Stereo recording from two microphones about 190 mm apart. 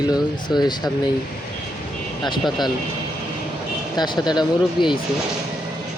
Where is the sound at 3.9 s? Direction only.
20° left (ahead or behind).